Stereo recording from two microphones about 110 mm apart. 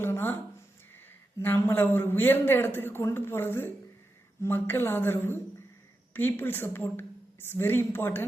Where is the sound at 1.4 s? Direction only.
20° left (ahead or behind).